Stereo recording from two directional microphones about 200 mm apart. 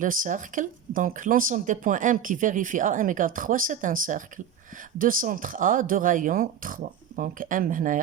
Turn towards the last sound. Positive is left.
turn(degrees=-40)  # may be behind; listen again after turning